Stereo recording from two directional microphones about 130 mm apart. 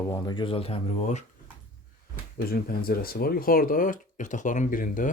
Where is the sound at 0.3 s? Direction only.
40° left (ahead or behind).